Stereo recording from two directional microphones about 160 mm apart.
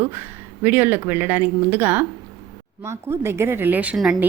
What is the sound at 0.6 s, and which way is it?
A woman's voice, 10° right (ahead or behind).